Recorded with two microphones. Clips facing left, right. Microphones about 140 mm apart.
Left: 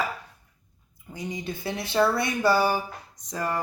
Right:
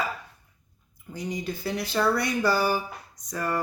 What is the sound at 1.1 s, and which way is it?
Speech, 20° left (ahead or behind).